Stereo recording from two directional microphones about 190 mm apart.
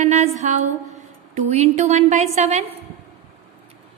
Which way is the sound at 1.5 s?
35° right (ahead or behind).